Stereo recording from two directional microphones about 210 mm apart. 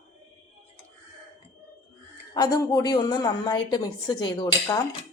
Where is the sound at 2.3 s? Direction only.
15° left (ahead or behind).